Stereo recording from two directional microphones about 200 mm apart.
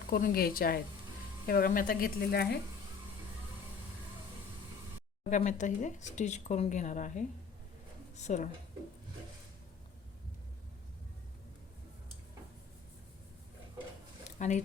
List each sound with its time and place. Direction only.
0.1 s speech: 50° left (ahead or behind)
5.3 s speech: 40° left (ahead or behind)
14.3 s speech: 35° left (ahead or behind)